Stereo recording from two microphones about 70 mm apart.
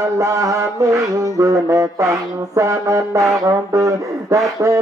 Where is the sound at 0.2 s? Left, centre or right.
Right.